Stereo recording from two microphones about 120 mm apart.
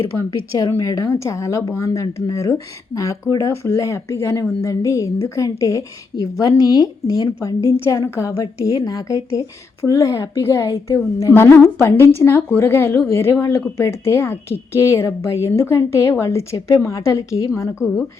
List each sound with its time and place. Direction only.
0.8 s speech: 30° left (ahead or behind)